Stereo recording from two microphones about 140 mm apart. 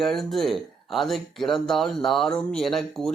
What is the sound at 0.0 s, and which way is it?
Speech, centre (ahead or behind).